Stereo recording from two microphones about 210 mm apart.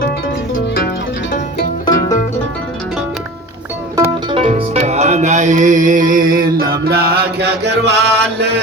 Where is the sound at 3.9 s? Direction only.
20° right (ahead or behind); by 7.9 s 55° right (ahead or behind).